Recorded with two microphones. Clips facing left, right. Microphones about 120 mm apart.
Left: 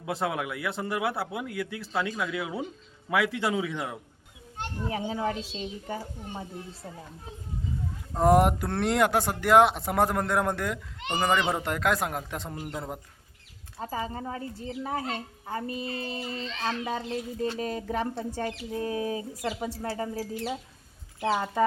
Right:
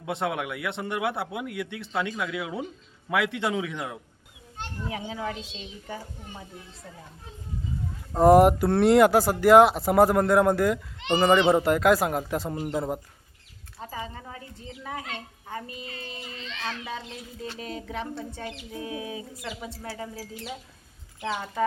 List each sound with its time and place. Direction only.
0.1 s speech: centre (ahead or behind)
4.8 s speech: 35° left (ahead or behind)
8.1 s speech: 5° right (ahead or behind)
13.8 s speech: 40° left (ahead or behind)